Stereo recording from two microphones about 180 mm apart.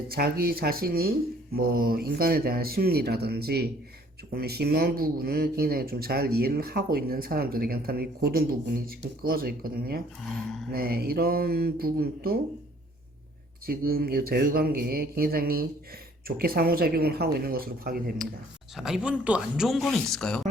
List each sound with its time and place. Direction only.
0.1 s speech: 55° right (ahead or behind)
13.7 s speech: 55° right (ahead or behind)
18.8 s speech: centre (ahead or behind)